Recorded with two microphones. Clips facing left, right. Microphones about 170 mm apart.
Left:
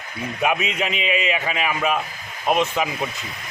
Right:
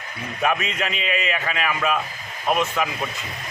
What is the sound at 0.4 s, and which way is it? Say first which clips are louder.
A man's voice: left 1 dB; 10° left (ahead or behind).